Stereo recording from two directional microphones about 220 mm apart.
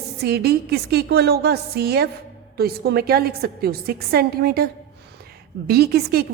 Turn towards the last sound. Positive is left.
turn(degrees=-45)  # may be behind; listen again after turning